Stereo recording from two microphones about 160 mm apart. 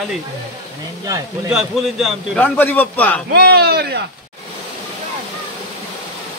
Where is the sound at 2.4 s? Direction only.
10° left (ahead or behind).